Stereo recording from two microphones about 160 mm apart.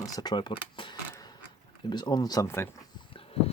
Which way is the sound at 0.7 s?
30° left (ahead or behind).